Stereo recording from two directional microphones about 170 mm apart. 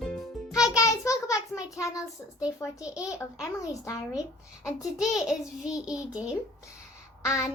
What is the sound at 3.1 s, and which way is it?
Speech, 20° left (ahead or behind).